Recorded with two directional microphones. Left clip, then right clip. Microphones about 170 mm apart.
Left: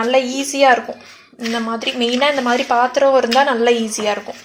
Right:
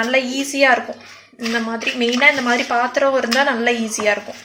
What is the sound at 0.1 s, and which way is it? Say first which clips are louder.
A woman's voice: left 2 dB; 15° left (ahead or behind).